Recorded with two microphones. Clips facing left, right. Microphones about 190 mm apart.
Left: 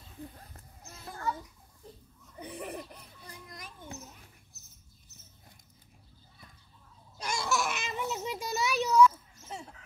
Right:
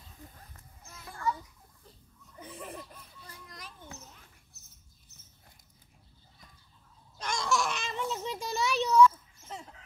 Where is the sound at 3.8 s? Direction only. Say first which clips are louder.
Left 4 dB; 15° left (ahead or behind).